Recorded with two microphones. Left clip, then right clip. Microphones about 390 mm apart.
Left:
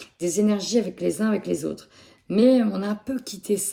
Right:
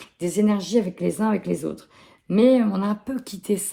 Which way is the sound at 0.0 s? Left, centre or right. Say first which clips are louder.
Even; centre.